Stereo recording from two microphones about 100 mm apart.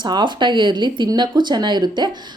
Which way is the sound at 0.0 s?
50° right (ahead or behind).